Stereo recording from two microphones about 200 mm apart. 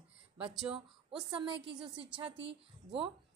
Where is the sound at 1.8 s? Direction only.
25° right (ahead or behind).